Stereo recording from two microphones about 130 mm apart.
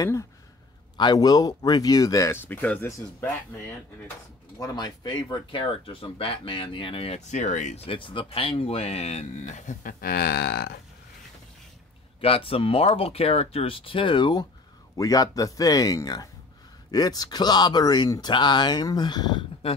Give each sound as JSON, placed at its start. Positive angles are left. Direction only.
{"t": 0.0, "sound": "speech", "side_deg": 25}
{"t": 4.6, "sound": "speech", "side_deg": 30}
{"t": 12.2, "sound": "speech", "side_deg": 45}